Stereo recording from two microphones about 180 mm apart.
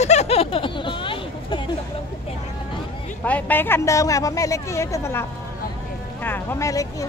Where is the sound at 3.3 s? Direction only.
10° left (ahead or behind).